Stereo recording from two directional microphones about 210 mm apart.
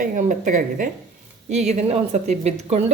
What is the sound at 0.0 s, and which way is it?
A woman's voice, 40° right (ahead or behind).